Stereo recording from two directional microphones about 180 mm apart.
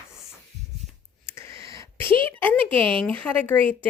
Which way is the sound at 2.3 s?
10° left (ahead or behind).